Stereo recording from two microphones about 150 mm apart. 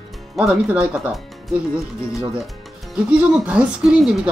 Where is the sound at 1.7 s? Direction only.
20° left (ahead or behind).